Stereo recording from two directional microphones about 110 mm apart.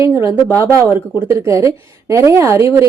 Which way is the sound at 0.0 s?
25° right (ahead or behind).